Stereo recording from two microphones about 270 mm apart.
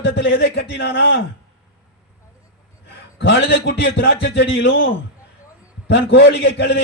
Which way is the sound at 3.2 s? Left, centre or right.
Left.